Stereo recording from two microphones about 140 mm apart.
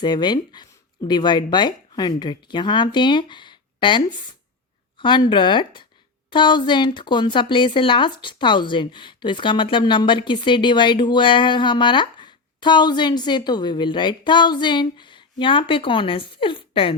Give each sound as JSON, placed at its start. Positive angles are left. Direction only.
{"t": 0.0, "sound": "speech", "side_deg": 30}